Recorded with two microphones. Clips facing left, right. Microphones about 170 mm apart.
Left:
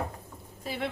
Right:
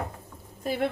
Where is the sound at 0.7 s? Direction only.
50° right (ahead or behind).